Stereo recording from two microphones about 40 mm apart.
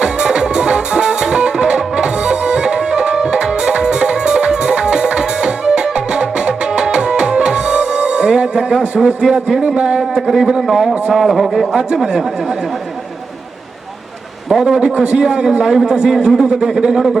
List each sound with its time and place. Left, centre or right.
0.0 s music: centre
9.2 s a man's voice: centre
10.2 s a man's voice: centre
14.5 s a man's voice: centre
14.8 s a man's voice: right